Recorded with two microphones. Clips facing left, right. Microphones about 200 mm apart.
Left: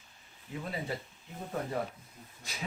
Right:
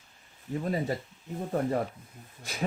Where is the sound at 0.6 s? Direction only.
45° right (ahead or behind).